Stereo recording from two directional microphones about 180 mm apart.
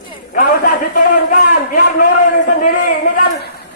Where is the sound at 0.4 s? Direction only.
50° left (ahead or behind).